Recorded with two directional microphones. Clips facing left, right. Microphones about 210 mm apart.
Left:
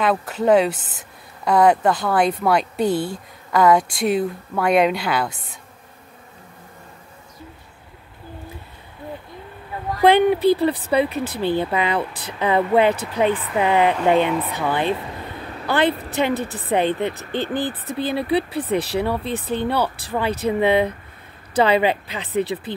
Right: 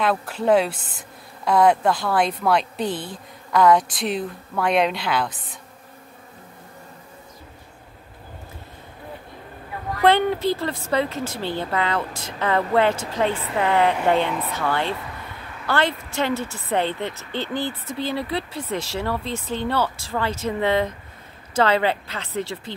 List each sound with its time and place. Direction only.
0.0 s speech: 5° left (ahead or behind)
10.0 s a woman's voice: 15° left (ahead or behind)
17.9 s speech: 15° left (ahead or behind)